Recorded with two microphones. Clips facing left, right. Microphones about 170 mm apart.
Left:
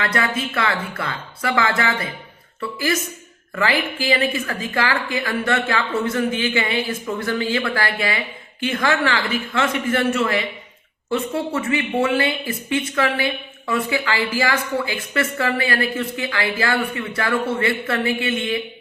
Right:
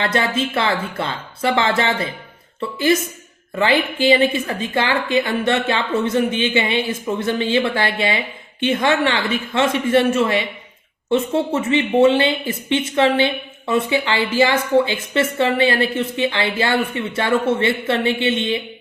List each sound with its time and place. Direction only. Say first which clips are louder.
0.0 s speech: right 3 dB; 25° right (ahead or behind)